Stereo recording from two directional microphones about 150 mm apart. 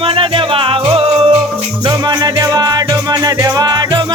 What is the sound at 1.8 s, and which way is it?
Music, 25° right (ahead or behind).